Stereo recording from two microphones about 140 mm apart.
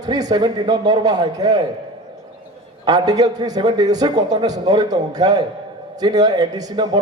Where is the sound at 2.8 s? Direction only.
30° right (ahead or behind).